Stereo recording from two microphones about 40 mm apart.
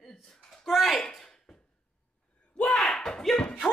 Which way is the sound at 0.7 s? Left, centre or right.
Centre.